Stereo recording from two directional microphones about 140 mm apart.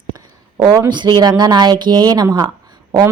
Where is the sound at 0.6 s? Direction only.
25° right (ahead or behind).